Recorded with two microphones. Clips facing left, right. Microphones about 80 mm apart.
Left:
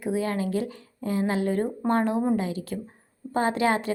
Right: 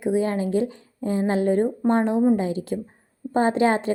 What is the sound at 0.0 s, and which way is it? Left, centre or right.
A woman's voice, right.